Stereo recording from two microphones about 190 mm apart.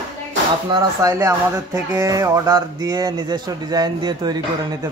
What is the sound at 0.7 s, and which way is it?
Speech, 20° right (ahead or behind).